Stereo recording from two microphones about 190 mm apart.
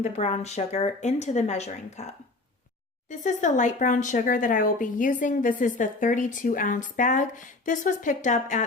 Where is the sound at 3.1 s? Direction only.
40° left (ahead or behind).